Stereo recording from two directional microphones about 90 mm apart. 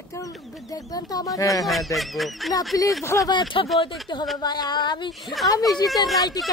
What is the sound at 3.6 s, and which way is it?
Speech, 70° left (ahead or behind).